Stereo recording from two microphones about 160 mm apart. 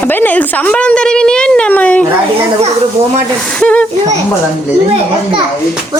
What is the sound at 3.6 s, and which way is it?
Speech, 10° left (ahead or behind).